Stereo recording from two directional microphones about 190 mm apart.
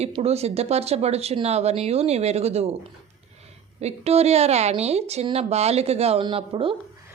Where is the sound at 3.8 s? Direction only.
35° right (ahead or behind).